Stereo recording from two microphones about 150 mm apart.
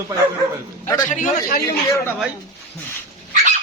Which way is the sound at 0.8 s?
20° left (ahead or behind).